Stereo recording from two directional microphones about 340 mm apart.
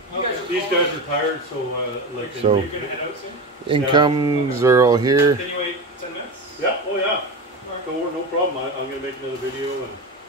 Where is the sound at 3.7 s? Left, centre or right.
Centre.